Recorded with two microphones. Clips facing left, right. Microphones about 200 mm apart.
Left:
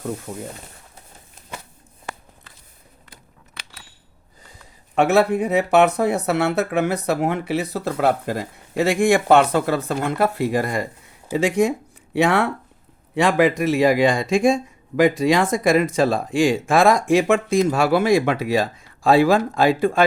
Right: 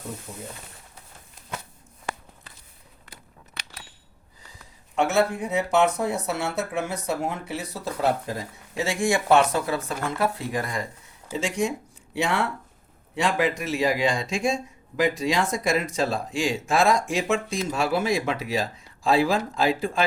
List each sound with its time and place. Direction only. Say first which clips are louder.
4.9 s a man's voice: left 6 dB; 65° left (ahead or behind)